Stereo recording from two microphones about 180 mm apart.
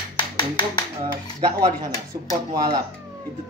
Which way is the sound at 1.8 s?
20° right (ahead or behind).